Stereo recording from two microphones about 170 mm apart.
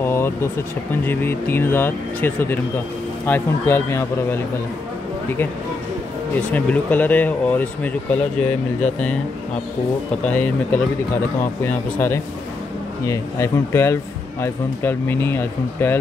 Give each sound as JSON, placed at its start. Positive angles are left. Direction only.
{"t": 0.0, "sound": "a sound", "side_deg": 15}
{"t": 1.0, "sound": "speech", "side_deg": 10}
{"t": 6.5, "sound": "speech", "side_deg": 10}
{"t": 10.2, "sound": "speech", "side_deg": 10}